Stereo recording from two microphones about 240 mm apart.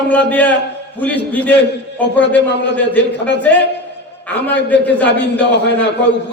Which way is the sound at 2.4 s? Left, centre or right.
Left.